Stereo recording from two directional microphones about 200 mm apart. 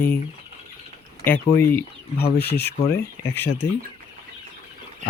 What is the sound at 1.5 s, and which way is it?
Speech, 50° left (ahead or behind).